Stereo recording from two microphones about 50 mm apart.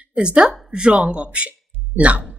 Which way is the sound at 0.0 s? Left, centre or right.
Right.